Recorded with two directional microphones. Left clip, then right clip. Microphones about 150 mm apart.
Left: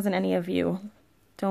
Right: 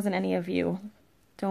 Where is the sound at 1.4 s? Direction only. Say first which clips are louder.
Left 3 dB; 20° left (ahead or behind).